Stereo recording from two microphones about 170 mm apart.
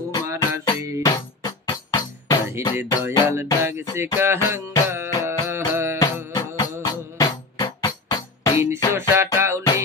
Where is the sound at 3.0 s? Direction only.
15° right (ahead or behind).